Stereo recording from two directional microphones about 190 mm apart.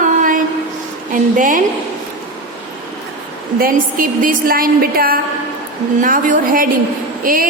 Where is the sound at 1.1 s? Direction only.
45° right (ahead or behind).